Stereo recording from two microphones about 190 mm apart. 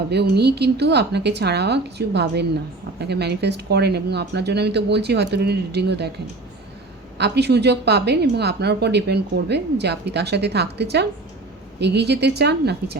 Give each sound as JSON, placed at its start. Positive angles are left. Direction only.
{"t": 0.1, "sound": "speech", "side_deg": -60}
{"t": 7.2, "sound": "speech", "side_deg": -60}